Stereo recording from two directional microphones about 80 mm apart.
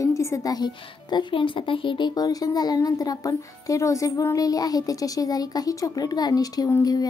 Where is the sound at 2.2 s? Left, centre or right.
Left.